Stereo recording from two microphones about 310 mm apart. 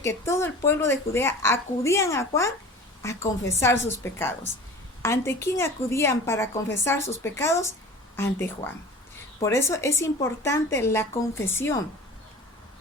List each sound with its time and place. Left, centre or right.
0.0 s a woman's voice: centre